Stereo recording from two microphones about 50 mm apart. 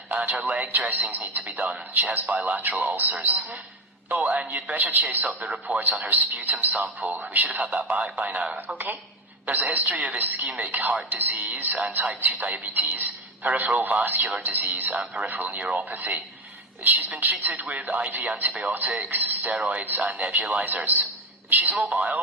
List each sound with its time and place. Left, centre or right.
0.1 s a man's voice: right